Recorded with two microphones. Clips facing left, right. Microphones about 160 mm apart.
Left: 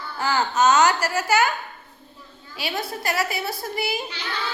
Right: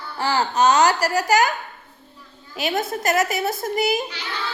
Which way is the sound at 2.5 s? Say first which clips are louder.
Right 5 dB; 45° right (ahead or behind).